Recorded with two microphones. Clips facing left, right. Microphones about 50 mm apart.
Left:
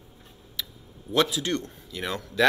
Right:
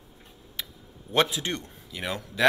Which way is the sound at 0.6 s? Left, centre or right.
Right.